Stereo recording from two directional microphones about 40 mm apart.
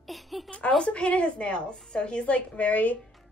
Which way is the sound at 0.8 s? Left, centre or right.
Left.